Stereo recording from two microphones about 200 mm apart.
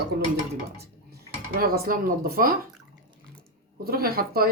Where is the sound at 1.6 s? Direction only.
45° right (ahead or behind).